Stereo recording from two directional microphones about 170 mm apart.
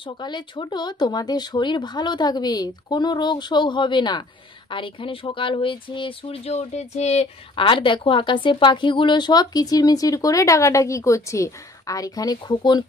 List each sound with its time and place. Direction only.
0.0 s speech: 25° left (ahead or behind)